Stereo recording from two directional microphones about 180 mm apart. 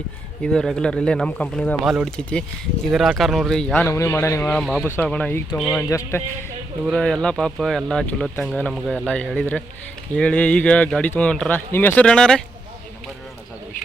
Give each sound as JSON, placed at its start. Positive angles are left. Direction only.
{"t": 0.4, "sound": "speech", "side_deg": 0}
{"t": 4.4, "sound": "speech", "side_deg": 5}